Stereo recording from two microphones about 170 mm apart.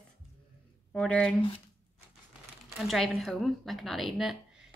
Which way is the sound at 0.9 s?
5° left (ahead or behind).